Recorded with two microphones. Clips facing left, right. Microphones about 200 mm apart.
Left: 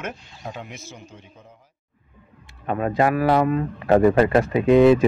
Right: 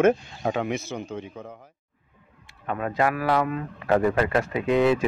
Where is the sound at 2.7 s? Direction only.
30° left (ahead or behind).